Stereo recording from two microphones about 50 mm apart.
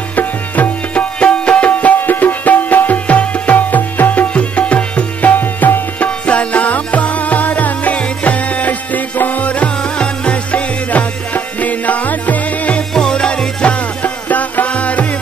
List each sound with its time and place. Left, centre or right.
0.1 s music: left
0.9 s music: left
5.4 s tabla: left
6.0 s music: left
12.9 s music: centre